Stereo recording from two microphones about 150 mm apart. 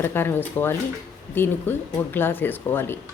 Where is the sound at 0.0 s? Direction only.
15° left (ahead or behind).